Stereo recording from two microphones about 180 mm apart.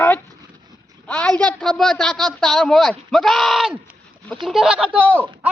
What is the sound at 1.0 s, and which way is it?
A woman's voice, 5° left (ahead or behind).